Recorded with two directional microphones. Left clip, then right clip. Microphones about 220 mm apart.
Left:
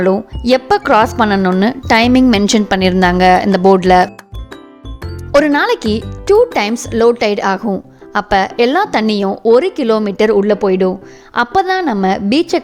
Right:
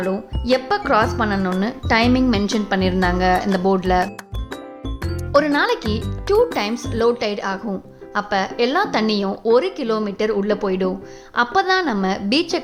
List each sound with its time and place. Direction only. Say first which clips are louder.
0.0 s speech: left 10 dB; 45° left (ahead or behind)
5.3 s speech: left 6 dB; 35° left (ahead or behind)